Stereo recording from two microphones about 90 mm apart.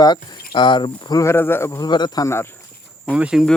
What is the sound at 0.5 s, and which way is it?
Speech, 65° left (ahead or behind).